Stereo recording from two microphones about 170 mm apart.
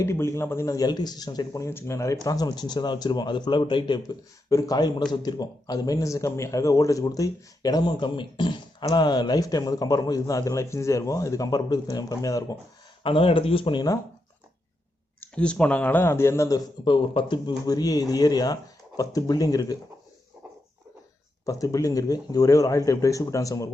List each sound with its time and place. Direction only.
0.0 s a man's voice: 15° left (ahead or behind)
13.0 s speech: 30° left (ahead or behind)
15.2 s a man's voice: 5° left (ahead or behind); by 19.7 s 20° left (ahead or behind)
21.4 s a man's voice: 20° left (ahead or behind)